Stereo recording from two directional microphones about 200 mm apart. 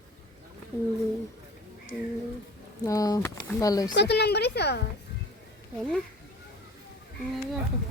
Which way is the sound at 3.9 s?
55° left (ahead or behind).